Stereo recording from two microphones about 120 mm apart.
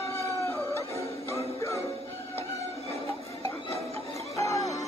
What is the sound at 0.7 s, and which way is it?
Music, 25° left (ahead or behind).